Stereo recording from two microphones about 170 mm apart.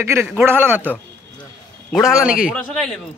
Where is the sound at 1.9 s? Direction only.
5° right (ahead or behind).